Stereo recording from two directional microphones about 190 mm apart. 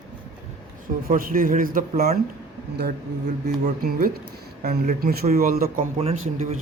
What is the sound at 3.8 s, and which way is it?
A man's voice, 55° right (ahead or behind).